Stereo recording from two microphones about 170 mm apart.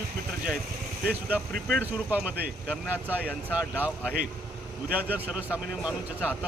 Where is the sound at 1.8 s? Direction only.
10° right (ahead or behind).